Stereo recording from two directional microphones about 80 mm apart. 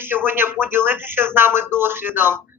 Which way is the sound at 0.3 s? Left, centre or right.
Right.